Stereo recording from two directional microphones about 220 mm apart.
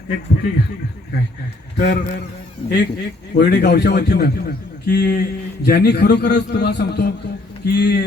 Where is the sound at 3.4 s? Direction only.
50° left (ahead or behind).